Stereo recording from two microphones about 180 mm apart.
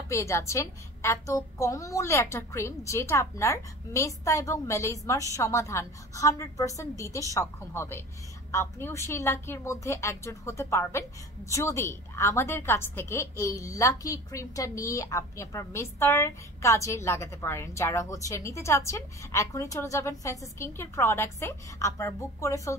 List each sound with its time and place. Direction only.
0.1 s a woman's voice: 15° left (ahead or behind)